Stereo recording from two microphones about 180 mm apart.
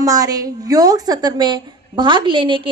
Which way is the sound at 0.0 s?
20° right (ahead or behind).